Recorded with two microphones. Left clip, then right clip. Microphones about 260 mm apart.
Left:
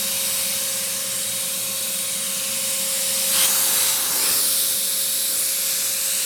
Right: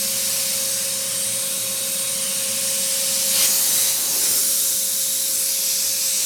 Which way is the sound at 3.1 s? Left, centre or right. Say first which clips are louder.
Even; centre.